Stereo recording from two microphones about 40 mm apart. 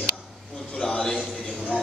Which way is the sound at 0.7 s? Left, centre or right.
Centre.